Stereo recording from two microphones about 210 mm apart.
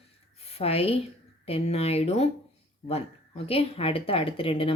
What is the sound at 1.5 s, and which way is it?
Speech, 30° left (ahead or behind).